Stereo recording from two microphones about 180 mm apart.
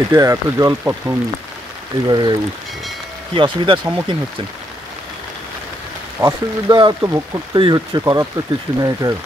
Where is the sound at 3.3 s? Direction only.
25° right (ahead or behind).